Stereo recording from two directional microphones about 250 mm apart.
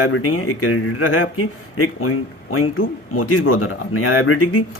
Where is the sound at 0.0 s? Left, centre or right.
Left.